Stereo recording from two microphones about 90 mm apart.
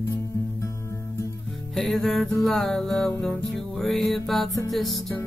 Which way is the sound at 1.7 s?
5° left (ahead or behind).